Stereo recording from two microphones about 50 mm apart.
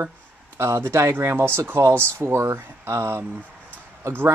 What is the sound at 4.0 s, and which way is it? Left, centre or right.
Speech, right.